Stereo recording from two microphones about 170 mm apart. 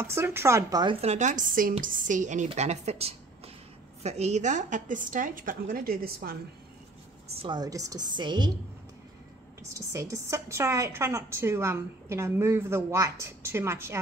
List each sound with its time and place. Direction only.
0.0 s a woman's voice: 15° right (ahead or behind)
1.0 s a woman's voice: 45° right (ahead or behind); by 6.3 s 60° right (ahead or behind)
7.3 s a woman's voice: 25° right (ahead or behind)
9.6 s a woman's voice: 20° right (ahead or behind)